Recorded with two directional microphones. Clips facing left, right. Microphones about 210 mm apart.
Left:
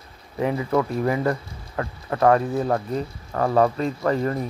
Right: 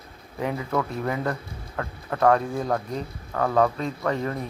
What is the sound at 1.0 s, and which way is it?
Speech, 5° left (ahead or behind).